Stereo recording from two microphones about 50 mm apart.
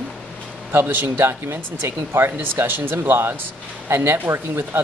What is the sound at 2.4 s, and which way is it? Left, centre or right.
Speech, right.